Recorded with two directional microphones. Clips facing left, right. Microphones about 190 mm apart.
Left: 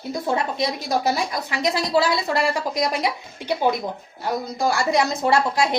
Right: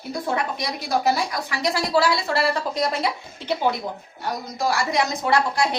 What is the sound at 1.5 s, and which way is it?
Speech, 20° left (ahead or behind).